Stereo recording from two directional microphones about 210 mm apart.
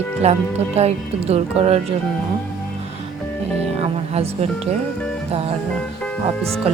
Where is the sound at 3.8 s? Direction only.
30° right (ahead or behind).